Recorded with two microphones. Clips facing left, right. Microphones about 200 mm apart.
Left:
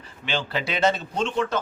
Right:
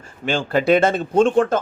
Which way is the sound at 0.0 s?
50° right (ahead or behind).